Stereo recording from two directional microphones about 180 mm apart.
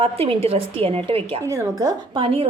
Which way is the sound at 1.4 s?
15° right (ahead or behind).